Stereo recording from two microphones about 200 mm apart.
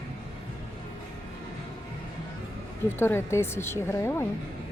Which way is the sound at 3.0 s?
10° left (ahead or behind).